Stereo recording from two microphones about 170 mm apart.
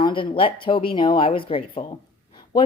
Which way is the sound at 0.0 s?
30° left (ahead or behind).